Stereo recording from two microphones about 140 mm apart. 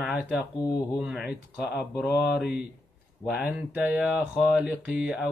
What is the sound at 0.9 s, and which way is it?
Speech, 5° right (ahead or behind).